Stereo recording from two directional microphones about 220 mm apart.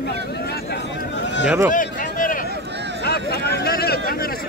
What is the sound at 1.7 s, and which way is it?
Run, 35° left (ahead or behind).